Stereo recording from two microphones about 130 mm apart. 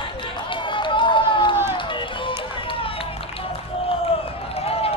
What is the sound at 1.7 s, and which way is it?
Music, 40° left (ahead or behind).